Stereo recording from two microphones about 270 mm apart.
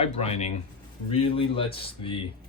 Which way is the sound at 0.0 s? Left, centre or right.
Left.